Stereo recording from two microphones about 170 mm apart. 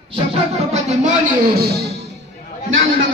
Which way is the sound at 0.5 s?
40° right (ahead or behind).